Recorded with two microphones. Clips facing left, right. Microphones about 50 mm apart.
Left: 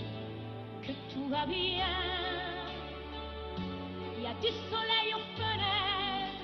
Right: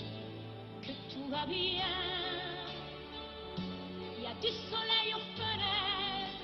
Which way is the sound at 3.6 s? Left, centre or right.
Centre.